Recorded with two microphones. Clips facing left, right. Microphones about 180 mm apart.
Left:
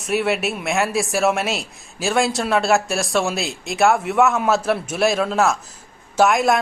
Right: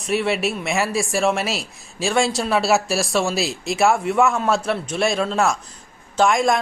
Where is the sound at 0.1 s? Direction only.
Centre (ahead or behind).